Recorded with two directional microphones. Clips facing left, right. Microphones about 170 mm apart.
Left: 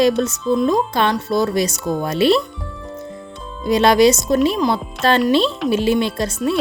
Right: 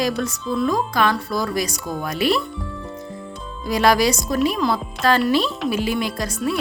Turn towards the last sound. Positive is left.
turn(degrees=25)  # may be behind; listen again after turning